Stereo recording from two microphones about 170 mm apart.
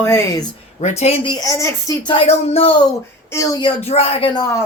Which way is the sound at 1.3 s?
20° left (ahead or behind).